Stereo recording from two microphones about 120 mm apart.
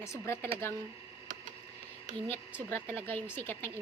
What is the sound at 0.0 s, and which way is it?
Speech, 25° left (ahead or behind).